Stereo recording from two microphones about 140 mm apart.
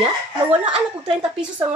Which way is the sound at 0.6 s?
5° right (ahead or behind).